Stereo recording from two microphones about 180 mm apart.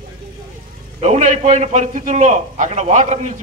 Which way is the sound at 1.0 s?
40° right (ahead or behind).